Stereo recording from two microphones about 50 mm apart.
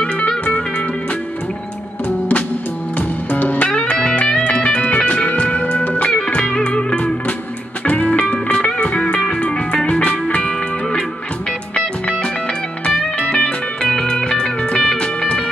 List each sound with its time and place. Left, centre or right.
0.3 s music: centre
3.0 s music: left; by 11.1 s centre
13.2 s music: centre